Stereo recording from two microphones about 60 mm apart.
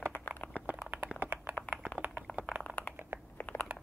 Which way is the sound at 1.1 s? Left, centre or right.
Right.